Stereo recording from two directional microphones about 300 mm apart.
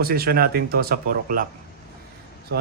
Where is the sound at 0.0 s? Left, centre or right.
Right.